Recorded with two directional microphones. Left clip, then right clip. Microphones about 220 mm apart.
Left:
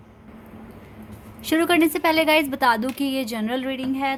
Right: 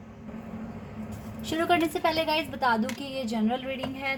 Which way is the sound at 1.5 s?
40° left (ahead or behind).